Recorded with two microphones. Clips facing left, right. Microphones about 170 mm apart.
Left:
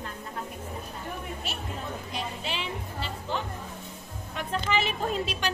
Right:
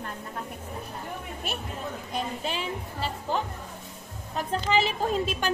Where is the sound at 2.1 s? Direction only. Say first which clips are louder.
Right 5 dB; 45° right (ahead or behind).